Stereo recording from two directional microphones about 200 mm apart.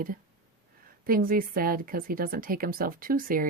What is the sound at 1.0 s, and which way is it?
A woman's voice, 45° right (ahead or behind).